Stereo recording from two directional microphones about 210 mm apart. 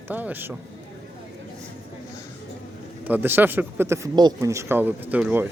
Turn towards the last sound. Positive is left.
turn(degrees=-10)  # may be behind; listen again after turning